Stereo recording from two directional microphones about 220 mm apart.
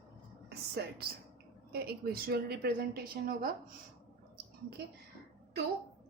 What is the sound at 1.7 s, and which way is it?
A woman's voice, 45° right (ahead or behind).